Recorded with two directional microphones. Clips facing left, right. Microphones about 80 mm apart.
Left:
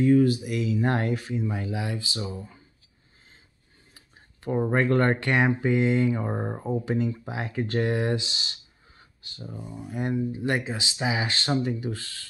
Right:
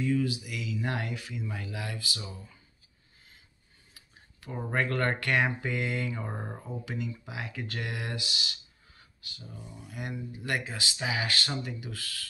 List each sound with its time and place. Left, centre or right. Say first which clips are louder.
0.0 s speech: left 9 dB; left
3.9 s speech: left 2 dB; left
6.6 s speech: left 13 dB; left